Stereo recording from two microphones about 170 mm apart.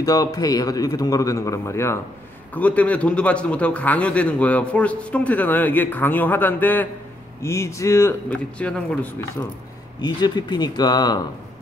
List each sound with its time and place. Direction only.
0.0 s a man's voice: 20° left (ahead or behind)
9.9 s a man's voice: 25° left (ahead or behind)